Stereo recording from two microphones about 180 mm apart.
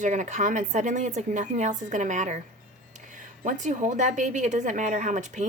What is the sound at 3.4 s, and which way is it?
Speech, 45° right (ahead or behind).